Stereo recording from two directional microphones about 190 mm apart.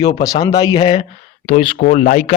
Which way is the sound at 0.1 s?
20° left (ahead or behind).